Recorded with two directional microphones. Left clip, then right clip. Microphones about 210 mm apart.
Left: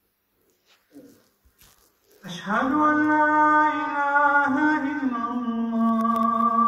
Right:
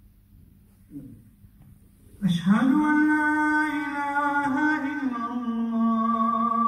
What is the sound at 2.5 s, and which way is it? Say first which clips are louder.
Mantra: left 2 dB; 15° right (ahead or behind).